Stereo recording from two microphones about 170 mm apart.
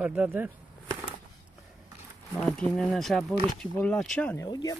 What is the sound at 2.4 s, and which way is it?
Speech, 5° left (ahead or behind).